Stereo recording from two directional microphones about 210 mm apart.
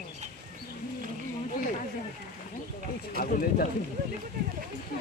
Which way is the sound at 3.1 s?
45° left (ahead or behind).